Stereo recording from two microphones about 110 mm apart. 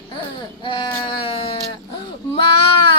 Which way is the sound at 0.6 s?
50° left (ahead or behind).